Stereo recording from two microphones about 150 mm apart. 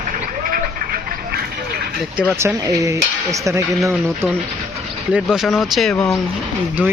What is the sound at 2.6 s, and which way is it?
Speech, 25° right (ahead or behind).